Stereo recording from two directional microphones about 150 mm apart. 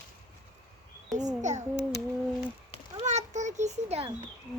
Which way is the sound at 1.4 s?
55° right (ahead or behind).